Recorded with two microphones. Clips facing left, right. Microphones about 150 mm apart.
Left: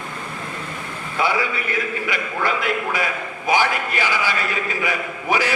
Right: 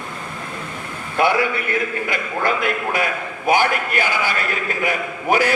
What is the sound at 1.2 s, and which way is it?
Speech, 60° right (ahead or behind).